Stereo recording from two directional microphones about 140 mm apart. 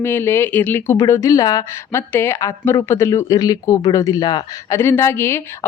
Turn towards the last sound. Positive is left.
turn(degrees=15)  # may be behind; listen again after turning